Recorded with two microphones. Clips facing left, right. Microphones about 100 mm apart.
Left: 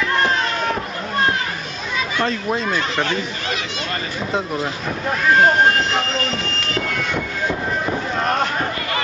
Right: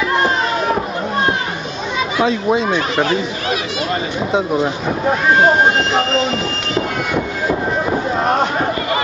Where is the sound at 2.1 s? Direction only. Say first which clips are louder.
Right 7 dB; 5° right (ahead or behind).